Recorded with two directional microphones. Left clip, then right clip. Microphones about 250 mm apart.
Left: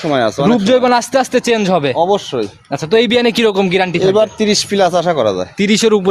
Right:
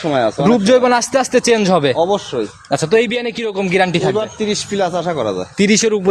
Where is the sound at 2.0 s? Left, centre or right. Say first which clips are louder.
Left 2 dB; left.